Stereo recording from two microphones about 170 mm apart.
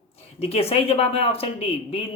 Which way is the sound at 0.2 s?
35° left (ahead or behind).